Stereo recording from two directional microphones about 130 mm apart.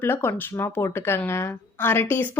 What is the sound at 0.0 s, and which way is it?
Speech, 15° left (ahead or behind).